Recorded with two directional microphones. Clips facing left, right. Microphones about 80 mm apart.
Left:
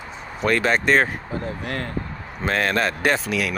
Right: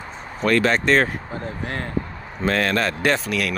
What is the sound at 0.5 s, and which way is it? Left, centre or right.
Speech, centre.